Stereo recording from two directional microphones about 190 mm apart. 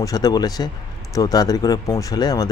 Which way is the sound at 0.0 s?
20° left (ahead or behind).